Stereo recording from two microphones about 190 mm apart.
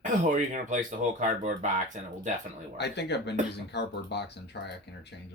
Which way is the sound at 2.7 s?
65° left (ahead or behind).